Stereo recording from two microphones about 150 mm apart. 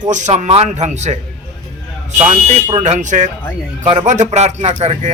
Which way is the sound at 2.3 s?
45° right (ahead or behind).